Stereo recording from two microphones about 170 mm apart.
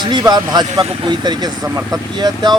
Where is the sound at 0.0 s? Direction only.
25° right (ahead or behind).